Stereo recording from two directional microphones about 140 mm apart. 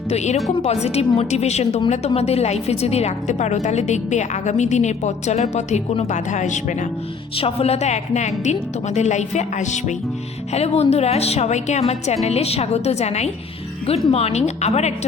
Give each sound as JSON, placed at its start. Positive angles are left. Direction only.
{"t": 0.1, "sound": "a woman's voice", "side_deg": 55}
{"t": 7.3, "sound": "a woman's voice", "side_deg": 45}
{"t": 10.5, "sound": "a woman's voice", "side_deg": 50}